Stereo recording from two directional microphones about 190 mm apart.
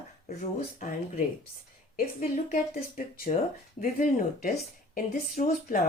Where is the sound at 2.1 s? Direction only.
40° left (ahead or behind).